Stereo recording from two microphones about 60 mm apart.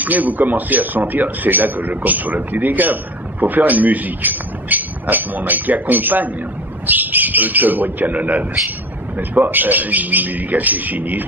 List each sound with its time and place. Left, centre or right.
0.0 s speech: right